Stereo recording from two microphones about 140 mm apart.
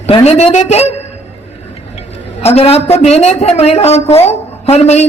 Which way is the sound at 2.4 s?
45° left (ahead or behind).